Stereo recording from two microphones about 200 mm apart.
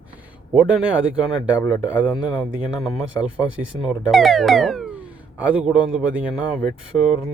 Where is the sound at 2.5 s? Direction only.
5° right (ahead or behind).